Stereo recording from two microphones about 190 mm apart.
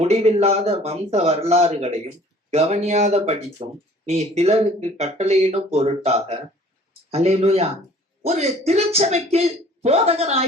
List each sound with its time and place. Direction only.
0.0 s speech: 35° right (ahead or behind)